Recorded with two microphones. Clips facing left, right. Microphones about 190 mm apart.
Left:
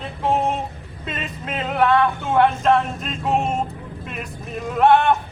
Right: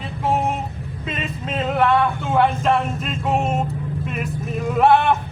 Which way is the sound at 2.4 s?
Centre (ahead or behind).